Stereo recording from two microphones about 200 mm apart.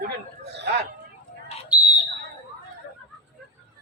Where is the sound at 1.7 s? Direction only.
5° right (ahead or behind).